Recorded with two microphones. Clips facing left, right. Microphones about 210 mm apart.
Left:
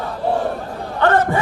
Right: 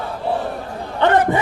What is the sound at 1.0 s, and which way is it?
Speech, 15° right (ahead or behind).